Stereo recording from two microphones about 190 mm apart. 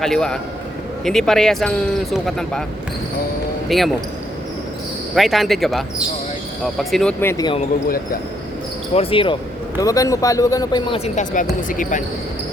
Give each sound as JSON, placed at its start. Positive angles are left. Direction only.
{"t": 0.0, "sound": "speech", "side_deg": 5}
{"t": 3.7, "sound": "speech", "side_deg": 0}
{"t": 5.1, "sound": "speech", "side_deg": 0}
{"t": 8.9, "sound": "speech", "side_deg": 30}
{"t": 9.8, "sound": "speech", "side_deg": 15}
{"t": 11.0, "sound": "speech", "side_deg": 40}